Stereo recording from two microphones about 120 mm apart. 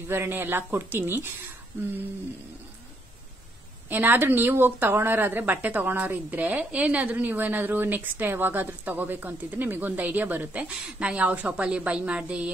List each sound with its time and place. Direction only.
0.1 s speech: 20° right (ahead or behind)
3.9 s speech: 15° right (ahead or behind)